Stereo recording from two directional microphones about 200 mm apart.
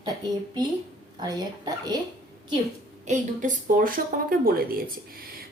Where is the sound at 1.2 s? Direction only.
20° right (ahead or behind).